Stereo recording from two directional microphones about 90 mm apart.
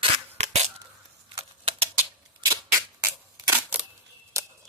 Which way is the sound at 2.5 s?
35° right (ahead or behind).